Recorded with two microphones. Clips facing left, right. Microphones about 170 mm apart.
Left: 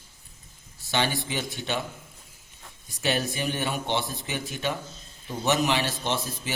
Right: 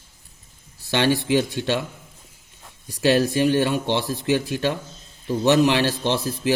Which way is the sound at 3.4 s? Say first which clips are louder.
Right 11 dB; 75° right (ahead or behind).